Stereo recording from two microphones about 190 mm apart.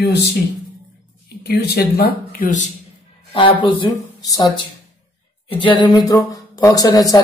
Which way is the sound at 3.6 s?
25° left (ahead or behind).